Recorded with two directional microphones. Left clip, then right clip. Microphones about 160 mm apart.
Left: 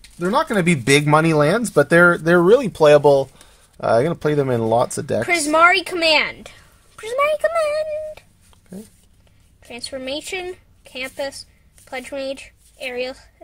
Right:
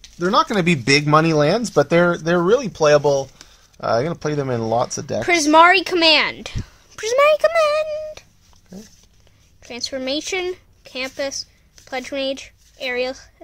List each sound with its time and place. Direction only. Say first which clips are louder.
0.2 s speech: right 1 dB; 10° right (ahead or behind)
0.8 s speech: even; 15° left (ahead or behind)
5.2 s speech: right 3 dB; 30° right (ahead or behind)
9.7 s a woman's voice: right 3 dB; 30° right (ahead or behind)